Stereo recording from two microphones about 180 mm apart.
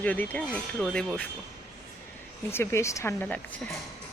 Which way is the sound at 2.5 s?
15° left (ahead or behind).